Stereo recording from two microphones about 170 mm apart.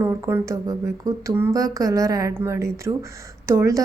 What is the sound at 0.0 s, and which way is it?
A woman's voice, 15° right (ahead or behind).